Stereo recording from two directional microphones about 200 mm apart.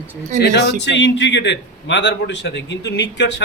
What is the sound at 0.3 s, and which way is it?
A man's voice, 60° left (ahead or behind).